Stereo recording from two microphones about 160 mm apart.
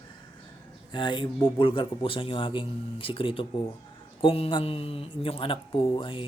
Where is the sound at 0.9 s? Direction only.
30° left (ahead or behind).